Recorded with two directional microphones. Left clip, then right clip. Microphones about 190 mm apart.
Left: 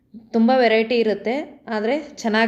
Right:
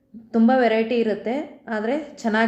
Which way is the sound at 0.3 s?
25° left (ahead or behind).